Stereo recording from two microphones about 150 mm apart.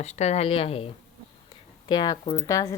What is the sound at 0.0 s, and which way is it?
Speech, 50° left (ahead or behind).